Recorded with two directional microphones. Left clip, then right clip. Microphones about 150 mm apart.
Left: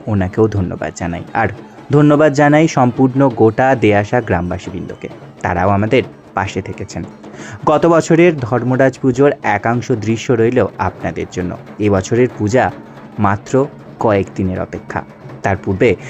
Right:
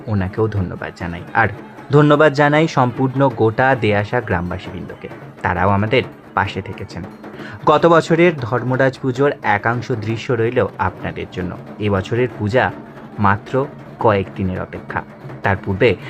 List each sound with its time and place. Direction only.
0.1 s speech: 35° left (ahead or behind)
2.0 s speech: 25° left (ahead or behind)
3.5 s speech: 30° left (ahead or behind)
7.9 s speech: 40° left (ahead or behind)
8.2 s speech: 25° left (ahead or behind)
9.3 s speech: 35° left (ahead or behind)